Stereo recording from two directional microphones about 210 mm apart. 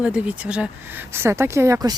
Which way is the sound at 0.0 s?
5° right (ahead or behind).